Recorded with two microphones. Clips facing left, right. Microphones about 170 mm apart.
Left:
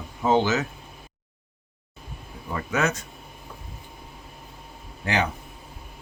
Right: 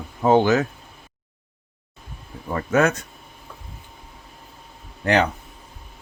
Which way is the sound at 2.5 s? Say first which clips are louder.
Right 6 dB; 50° right (ahead or behind).